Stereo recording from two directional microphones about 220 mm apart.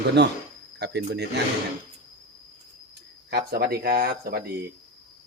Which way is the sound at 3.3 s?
45° right (ahead or behind).